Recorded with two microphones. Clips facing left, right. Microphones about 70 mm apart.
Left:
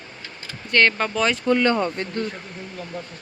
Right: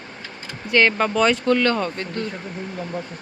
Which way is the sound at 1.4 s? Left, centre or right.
Centre.